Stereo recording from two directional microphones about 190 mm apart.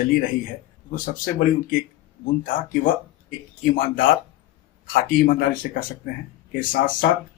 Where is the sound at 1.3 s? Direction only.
45° left (ahead or behind).